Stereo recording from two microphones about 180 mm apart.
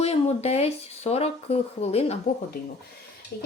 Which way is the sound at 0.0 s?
35° left (ahead or behind).